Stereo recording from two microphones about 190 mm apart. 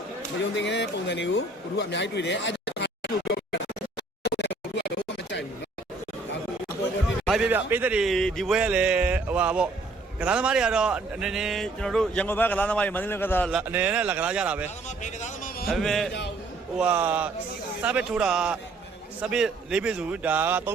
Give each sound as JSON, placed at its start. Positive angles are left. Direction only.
{"t": 0.5, "sound": "speech", "side_deg": 65}
{"t": 4.2, "sound": "scratch", "side_deg": 65}
{"t": 7.3, "sound": "speech", "side_deg": -5}
{"t": 13.5, "sound": "speech", "side_deg": -5}
{"t": 14.8, "sound": "a sound", "side_deg": 40}
{"t": 15.7, "sound": "speech", "side_deg": 0}